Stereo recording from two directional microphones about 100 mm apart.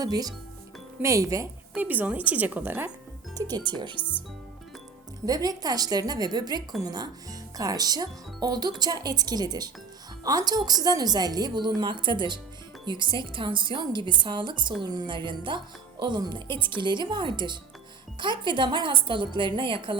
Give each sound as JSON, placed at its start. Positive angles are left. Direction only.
{"t": 0.0, "sound": "speech", "side_deg": -40}
{"t": 1.7, "sound": "a woman's voice", "side_deg": -15}
{"t": 3.4, "sound": "speech", "side_deg": -40}
{"t": 4.0, "sound": "speech", "side_deg": 15}
{"t": 5.2, "sound": "speech", "side_deg": -40}